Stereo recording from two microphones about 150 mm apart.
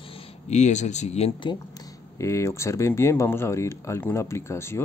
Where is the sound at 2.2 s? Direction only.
20° left (ahead or behind).